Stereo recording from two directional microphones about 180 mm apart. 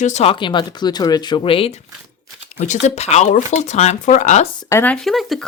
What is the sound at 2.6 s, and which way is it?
Speech, 40° left (ahead or behind).